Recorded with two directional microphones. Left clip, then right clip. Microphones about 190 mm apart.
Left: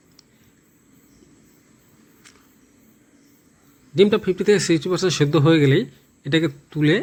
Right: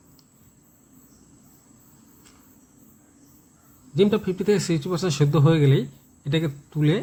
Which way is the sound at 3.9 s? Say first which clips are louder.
Left 4 dB; 15° left (ahead or behind).